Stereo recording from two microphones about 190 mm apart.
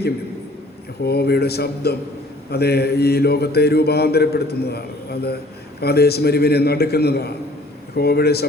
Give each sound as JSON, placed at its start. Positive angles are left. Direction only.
{"t": 1.0, "sound": "speech", "side_deg": 55}
{"t": 5.8, "sound": "speech", "side_deg": 55}